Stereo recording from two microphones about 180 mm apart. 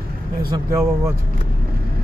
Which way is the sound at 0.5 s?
15° right (ahead or behind).